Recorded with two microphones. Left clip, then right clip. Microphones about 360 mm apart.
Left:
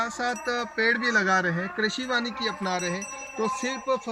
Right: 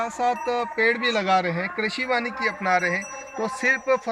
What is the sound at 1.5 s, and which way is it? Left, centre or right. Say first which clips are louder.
Speech: right 2 dB; right.